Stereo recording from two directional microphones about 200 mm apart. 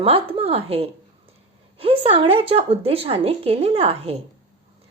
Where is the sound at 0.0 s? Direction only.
30° right (ahead or behind).